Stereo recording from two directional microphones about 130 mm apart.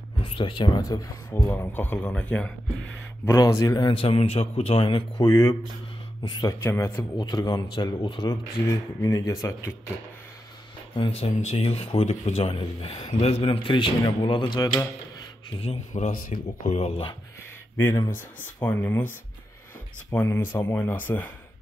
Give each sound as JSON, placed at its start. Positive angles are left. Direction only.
{"t": 0.2, "sound": "a sound", "side_deg": 40}
{"t": 0.7, "sound": "speech", "side_deg": 25}
{"t": 1.5, "sound": "speech", "side_deg": 15}
{"t": 3.3, "sound": "a man's voice", "side_deg": 25}
{"t": 5.3, "sound": "speech", "side_deg": 30}
{"t": 6.6, "sound": "speech", "side_deg": 20}
{"t": 7.2, "sound": "speech", "side_deg": 35}
{"t": 11.0, "sound": "a man's voice", "side_deg": 45}
{"t": 15.5, "sound": "a man's voice", "side_deg": 50}
{"t": 15.9, "sound": "speech", "side_deg": 80}
{"t": 18.1, "sound": "speech", "side_deg": 15}